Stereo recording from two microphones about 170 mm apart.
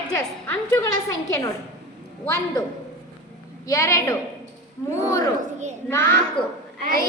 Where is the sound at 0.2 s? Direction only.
15° left (ahead or behind).